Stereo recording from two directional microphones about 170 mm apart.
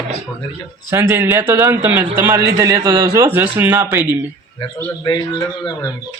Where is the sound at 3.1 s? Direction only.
15° right (ahead or behind).